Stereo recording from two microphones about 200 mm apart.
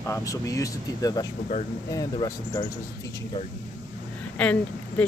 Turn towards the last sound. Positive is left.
turn(degrees=5)  # may be behind; listen again after turning